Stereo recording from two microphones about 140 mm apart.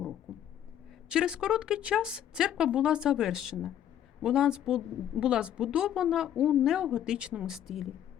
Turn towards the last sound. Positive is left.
turn(degrees=0)  # may be behind; listen again after turning